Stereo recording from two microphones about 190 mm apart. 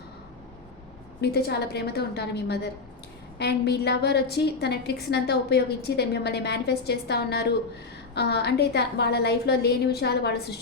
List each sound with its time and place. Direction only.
1.2 s a woman's voice: 55° left (ahead or behind)